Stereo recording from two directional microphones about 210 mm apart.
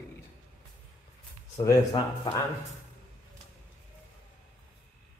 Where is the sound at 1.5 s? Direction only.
20° left (ahead or behind).